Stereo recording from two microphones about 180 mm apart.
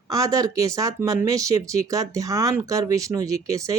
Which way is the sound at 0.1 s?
20° right (ahead or behind).